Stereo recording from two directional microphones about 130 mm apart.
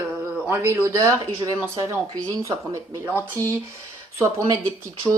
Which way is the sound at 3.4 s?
25° right (ahead or behind).